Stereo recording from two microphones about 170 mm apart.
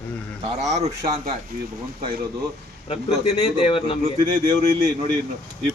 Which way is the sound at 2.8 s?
35° left (ahead or behind).